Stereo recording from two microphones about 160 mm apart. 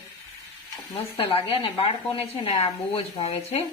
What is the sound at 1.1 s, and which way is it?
A woman's voice, 35° left (ahead or behind).